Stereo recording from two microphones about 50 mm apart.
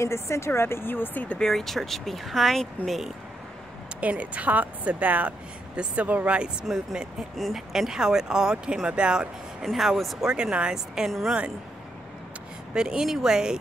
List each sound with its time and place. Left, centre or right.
0.0 s speech: left
0.5 s speech: left
1.4 s speech: centre
4.0 s a woman's voice: right
7.3 s speech: centre
9.7 s speech: centre
10.2 s speech: centre
11.1 s speech: centre
12.7 s speech: centre